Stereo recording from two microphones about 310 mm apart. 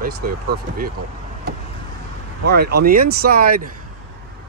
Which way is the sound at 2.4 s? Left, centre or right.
Right.